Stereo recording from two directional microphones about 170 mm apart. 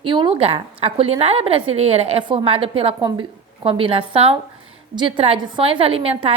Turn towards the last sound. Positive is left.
turn(degrees=-35)  # may be behind; listen again after turning